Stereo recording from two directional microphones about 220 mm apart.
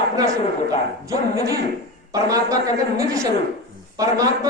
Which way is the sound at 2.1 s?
15° right (ahead or behind).